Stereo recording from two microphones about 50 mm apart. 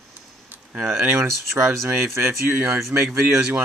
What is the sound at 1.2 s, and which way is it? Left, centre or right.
Speech, right.